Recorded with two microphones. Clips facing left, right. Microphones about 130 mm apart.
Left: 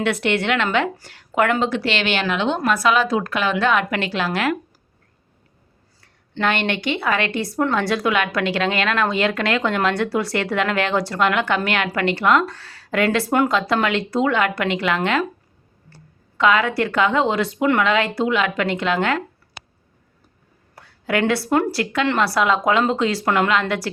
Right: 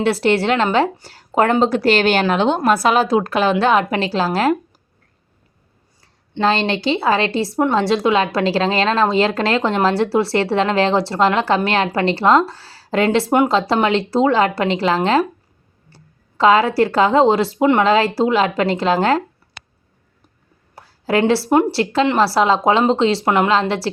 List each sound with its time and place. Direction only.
0.0 s a woman's voice: 30° right (ahead or behind)
6.0 s a woman's voice: 25° right (ahead or behind)
16.4 s a woman's voice: 35° right (ahead or behind)
20.7 s a woman's voice: 30° right (ahead or behind)